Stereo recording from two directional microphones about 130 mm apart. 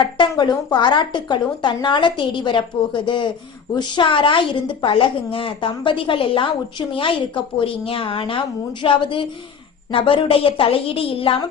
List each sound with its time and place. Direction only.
0.0 s a woman's voice: 35° left (ahead or behind)